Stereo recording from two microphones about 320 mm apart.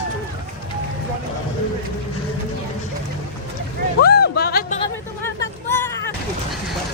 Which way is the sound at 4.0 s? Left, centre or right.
Left.